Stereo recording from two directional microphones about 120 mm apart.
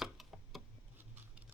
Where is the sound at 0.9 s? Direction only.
15° right (ahead or behind).